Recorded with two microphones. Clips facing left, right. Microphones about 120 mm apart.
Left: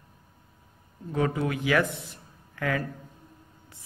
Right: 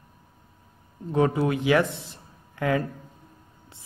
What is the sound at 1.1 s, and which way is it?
A man's voice, 25° right (ahead or behind).